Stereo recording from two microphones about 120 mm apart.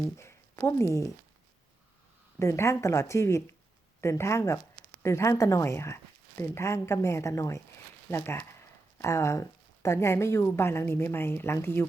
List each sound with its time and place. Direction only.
0.2 s speech: 25° left (ahead or behind)
2.4 s speech: 25° left (ahead or behind)